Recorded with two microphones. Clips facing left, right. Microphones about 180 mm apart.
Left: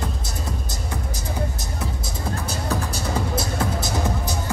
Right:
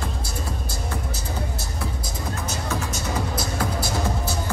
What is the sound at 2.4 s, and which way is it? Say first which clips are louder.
Music: left 1 dB; 35° left (ahead or behind).